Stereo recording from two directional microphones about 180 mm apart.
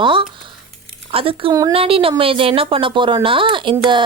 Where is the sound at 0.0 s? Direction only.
30° right (ahead or behind).